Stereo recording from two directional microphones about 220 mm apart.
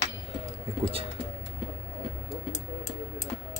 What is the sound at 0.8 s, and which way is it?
Speech, 25° right (ahead or behind).